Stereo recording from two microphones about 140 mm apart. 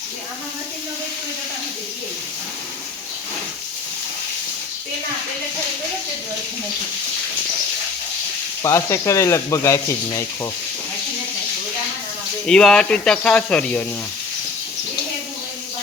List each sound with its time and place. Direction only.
8.6 s speech: 20° left (ahead or behind)
12.5 s speech: 5° left (ahead or behind)